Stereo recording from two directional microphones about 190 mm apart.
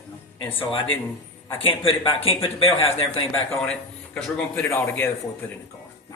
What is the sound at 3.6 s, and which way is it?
A man's voice, 5° left (ahead or behind).